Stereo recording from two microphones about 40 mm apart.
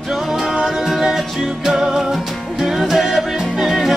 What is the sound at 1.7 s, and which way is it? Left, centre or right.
Music, centre.